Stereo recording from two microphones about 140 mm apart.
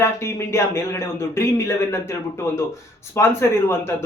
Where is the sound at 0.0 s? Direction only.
20° left (ahead or behind).